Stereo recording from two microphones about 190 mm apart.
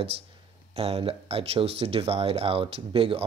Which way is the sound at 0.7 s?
30° right (ahead or behind).